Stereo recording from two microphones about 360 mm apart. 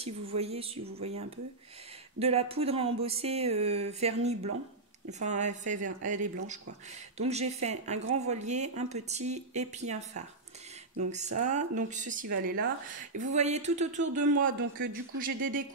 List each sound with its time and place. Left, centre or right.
0.0 s speech: centre
7.2 s speech: centre